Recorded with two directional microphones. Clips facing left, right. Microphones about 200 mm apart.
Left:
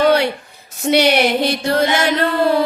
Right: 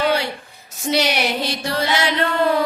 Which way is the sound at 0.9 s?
60° left (ahead or behind).